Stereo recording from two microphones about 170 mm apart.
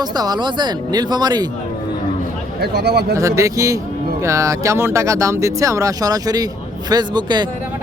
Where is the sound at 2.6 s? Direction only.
75° right (ahead or behind).